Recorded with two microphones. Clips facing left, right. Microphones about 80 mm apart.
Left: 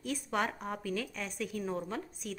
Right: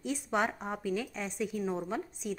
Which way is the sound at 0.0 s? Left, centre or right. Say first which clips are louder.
Right 2 dB; centre.